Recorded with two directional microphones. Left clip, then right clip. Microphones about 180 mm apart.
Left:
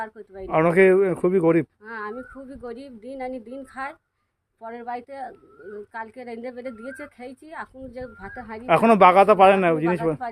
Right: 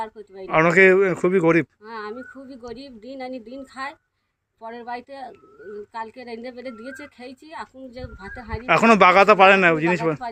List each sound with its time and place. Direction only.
0.0 s speech: 5° left (ahead or behind)
1.8 s speech: 10° left (ahead or behind)
8.6 s speech: centre (ahead or behind)